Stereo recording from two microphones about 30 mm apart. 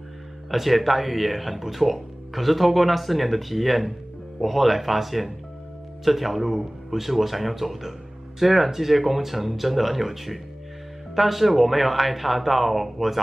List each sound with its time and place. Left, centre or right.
0.5 s speech: centre